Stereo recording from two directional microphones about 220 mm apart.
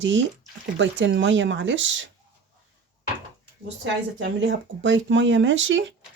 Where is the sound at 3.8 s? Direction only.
55° right (ahead or behind).